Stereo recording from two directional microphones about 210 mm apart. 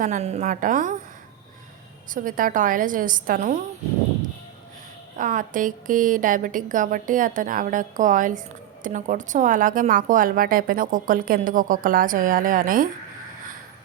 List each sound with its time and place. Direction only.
0.0 s a woman's voice: 35° right (ahead or behind)
2.0 s a woman's voice: 40° right (ahead or behind)
5.1 s a woman's voice: 40° right (ahead or behind)